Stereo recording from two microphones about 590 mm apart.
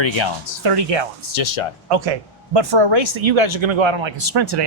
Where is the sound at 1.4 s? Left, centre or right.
Left.